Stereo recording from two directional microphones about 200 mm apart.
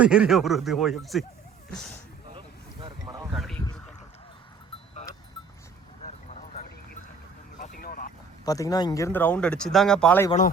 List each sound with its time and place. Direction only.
0.0 s speech: 5° right (ahead or behind)
2.8 s boat: 20° right (ahead or behind)
3.3 s a sound: centre (ahead or behind)
6.0 s a sound: 35° left (ahead or behind)
7.6 s vehicle: 45° left (ahead or behind)
8.4 s speech: 15° left (ahead or behind)